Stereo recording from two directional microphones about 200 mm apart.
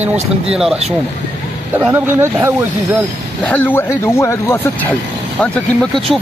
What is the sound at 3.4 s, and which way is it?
Speech, 10° left (ahead or behind).